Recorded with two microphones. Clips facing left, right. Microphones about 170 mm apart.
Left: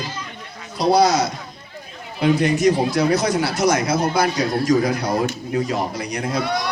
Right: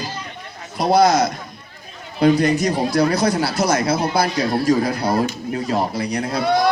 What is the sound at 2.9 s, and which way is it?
Speech, 35° right (ahead or behind).